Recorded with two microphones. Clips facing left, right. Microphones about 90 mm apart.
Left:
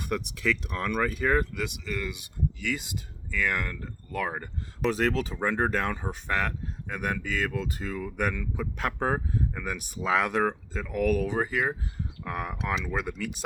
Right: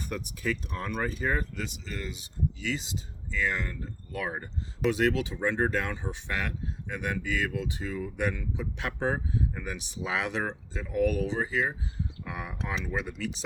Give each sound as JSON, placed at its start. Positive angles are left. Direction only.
{"t": 0.0, "sound": "speech", "side_deg": 65}
{"t": 2.6, "sound": "speech", "side_deg": 55}
{"t": 4.9, "sound": "speech", "side_deg": 40}